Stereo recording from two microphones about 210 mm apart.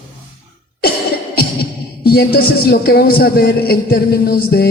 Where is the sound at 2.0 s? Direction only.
45° left (ahead or behind).